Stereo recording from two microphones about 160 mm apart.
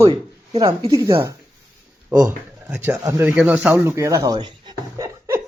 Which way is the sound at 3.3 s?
5° right (ahead or behind).